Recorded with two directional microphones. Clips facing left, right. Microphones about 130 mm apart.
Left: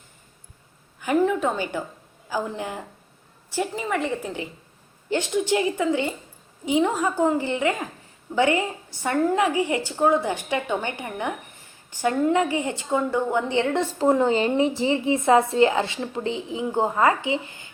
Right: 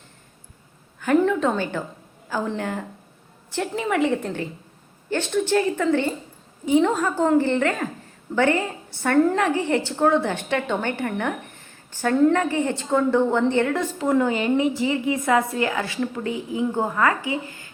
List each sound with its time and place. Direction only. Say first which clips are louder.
0.9 s a woman's voice: right 2 dB; 10° left (ahead or behind)
5.0 s a woman's voice: even; 15° left (ahead or behind)
13.7 s a woman's voice: left 1 dB; 25° left (ahead or behind)